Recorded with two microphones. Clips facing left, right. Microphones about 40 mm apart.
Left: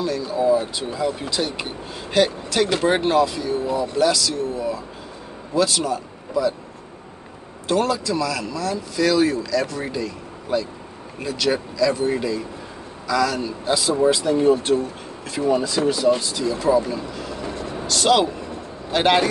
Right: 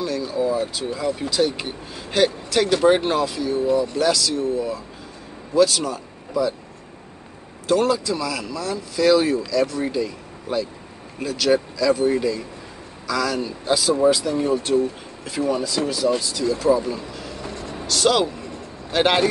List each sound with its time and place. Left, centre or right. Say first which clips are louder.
0.0 s speech: left 2 dB; centre
7.8 s speech: right 1 dB; centre
14.1 s speech: left 4 dB; centre